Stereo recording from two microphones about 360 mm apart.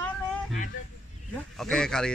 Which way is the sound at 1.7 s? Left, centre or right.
Centre.